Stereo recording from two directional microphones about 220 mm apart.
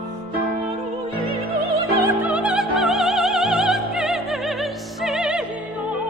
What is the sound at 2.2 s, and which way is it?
Music, 5° right (ahead or behind).